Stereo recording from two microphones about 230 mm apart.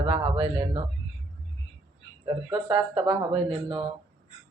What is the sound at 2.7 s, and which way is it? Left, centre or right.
Speech, centre.